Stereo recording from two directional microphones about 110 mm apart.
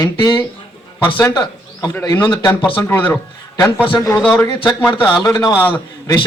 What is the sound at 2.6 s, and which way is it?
Speech, 50° left (ahead or behind).